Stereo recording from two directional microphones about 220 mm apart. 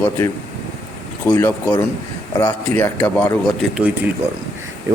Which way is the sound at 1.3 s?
10° left (ahead or behind).